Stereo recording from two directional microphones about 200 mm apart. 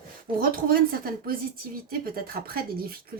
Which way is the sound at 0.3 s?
45° right (ahead or behind).